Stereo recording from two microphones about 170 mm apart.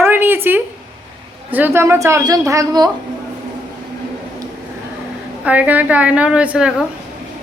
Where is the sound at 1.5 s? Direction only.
10° right (ahead or behind).